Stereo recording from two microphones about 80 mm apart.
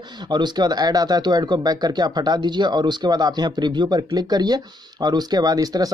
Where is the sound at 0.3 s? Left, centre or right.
Right.